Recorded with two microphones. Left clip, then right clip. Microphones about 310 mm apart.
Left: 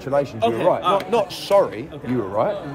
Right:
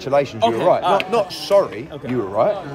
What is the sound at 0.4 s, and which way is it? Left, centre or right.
Speech, right.